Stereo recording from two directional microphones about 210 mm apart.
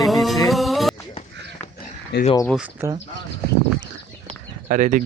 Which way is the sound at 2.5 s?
5° right (ahead or behind).